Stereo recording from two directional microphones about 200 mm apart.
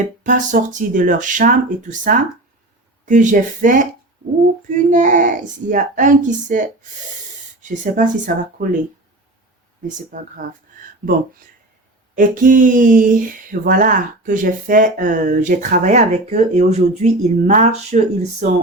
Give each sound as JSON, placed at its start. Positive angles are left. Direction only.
{"t": 0.2, "sound": "speech", "side_deg": -40}
{"t": 9.8, "sound": "speech", "side_deg": -40}
{"t": 12.1, "sound": "speech", "side_deg": -40}